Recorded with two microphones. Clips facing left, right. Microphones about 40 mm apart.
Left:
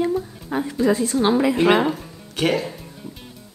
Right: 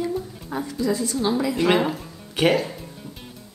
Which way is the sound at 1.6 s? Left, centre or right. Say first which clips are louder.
Left 1 dB; centre.